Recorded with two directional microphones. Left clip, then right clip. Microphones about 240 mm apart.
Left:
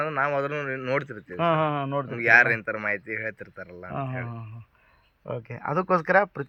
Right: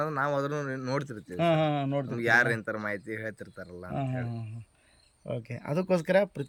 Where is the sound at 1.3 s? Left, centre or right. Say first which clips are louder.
Left 3 dB; centre.